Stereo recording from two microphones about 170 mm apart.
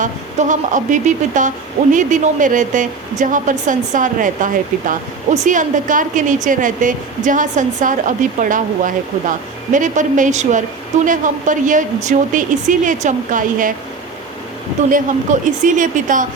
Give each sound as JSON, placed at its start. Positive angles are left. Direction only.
{"t": 0.0, "sound": "speech", "side_deg": -50}
{"t": 14.8, "sound": "speech", "side_deg": -50}